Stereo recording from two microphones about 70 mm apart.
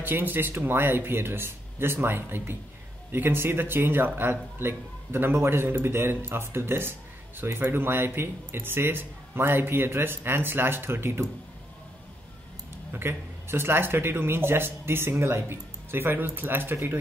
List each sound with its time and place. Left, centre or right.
0.0 s a man's voice: right
12.9 s a man's voice: right